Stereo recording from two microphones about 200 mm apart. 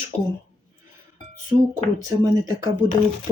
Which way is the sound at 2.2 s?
20° right (ahead or behind).